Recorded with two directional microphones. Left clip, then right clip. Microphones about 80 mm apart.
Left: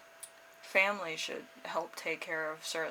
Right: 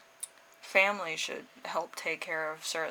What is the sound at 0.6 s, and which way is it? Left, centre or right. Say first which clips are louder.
Speech: right 3 dB; right.